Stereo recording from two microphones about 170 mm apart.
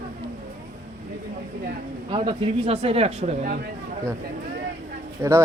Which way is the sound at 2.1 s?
30° right (ahead or behind).